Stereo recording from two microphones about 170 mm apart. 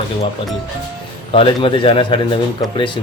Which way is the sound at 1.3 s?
30° left (ahead or behind).